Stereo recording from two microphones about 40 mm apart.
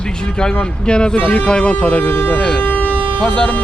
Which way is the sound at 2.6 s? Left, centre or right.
Left.